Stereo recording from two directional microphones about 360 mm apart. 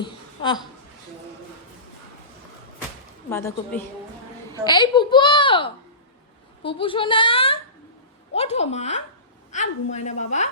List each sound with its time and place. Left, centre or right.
0.0 s speech: centre
3.2 s a woman's voice: centre